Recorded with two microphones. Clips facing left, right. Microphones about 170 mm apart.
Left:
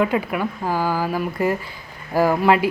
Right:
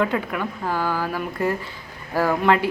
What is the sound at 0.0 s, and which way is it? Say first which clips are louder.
Speech: left 3 dB; 10° left (ahead or behind).